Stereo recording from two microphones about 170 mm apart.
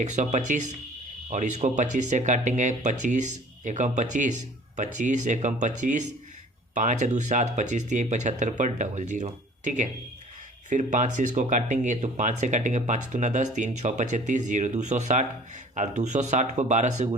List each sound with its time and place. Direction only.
0.0 s speech: 45° right (ahead or behind)